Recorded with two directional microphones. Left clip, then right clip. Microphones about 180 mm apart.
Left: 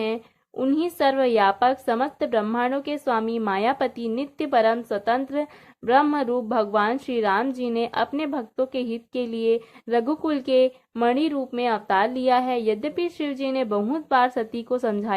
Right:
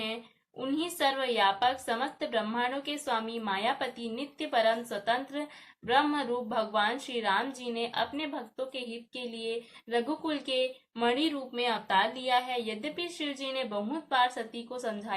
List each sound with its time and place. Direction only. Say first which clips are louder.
0.6 s a woman's voice: left 8 dB; 50° left (ahead or behind)